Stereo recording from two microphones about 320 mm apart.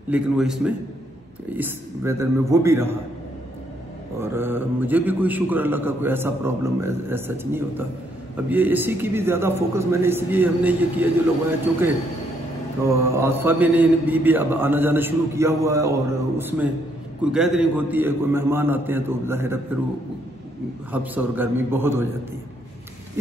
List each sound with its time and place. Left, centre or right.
0.1 s a man's voice: centre
4.2 s a man's voice: centre
12.8 s a man's voice: centre
20.9 s a man's voice: centre